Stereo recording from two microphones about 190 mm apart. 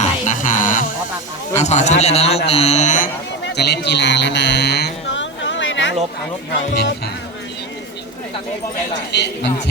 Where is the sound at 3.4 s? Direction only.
60° left (ahead or behind); by 5.9 s 80° left.